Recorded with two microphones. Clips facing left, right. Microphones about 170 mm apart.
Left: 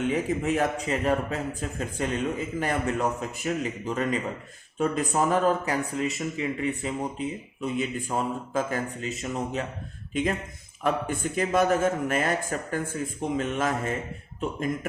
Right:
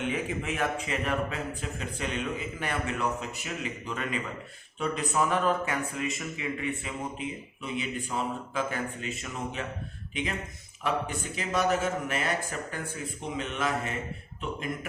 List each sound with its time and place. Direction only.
0.1 s speech: 40° left (ahead or behind)
10.8 s speech: 50° left (ahead or behind)